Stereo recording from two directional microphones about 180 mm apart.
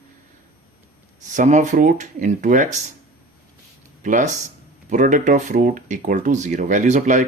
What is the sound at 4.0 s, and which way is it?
Speech, 45° right (ahead or behind).